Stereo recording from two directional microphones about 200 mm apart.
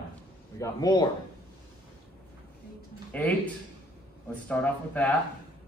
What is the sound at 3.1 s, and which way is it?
Speech, 5° left (ahead or behind).